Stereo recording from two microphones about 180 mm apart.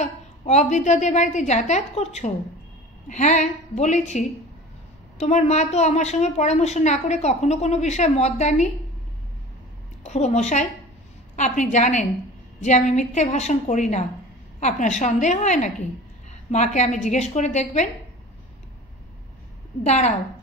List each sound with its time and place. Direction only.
0.0 s a woman's voice: 40° left (ahead or behind)
10.0 s a woman's voice: 40° left (ahead or behind)
19.8 s a woman's voice: 40° left (ahead or behind)